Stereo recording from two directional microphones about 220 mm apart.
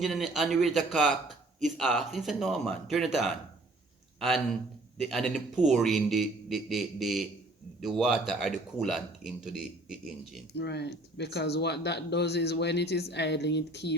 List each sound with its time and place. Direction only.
0.0 s a man's voice: centre (ahead or behind)
4.9 s a man's voice: centre (ahead or behind)
10.5 s speech: 50° left (ahead or behind)